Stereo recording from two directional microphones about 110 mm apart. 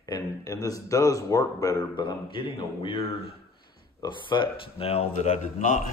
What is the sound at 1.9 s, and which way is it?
Speech, 50° left (ahead or behind).